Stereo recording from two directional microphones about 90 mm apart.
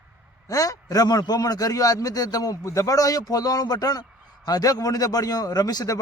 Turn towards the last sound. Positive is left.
turn(degrees=45)  # may be behind; listen again after turning